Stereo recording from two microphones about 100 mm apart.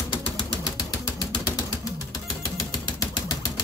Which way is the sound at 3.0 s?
40° left (ahead or behind).